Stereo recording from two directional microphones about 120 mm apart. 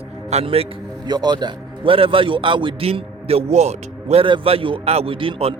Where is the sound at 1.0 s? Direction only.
35° right (ahead or behind); by 4.2 s 65° right (ahead or behind).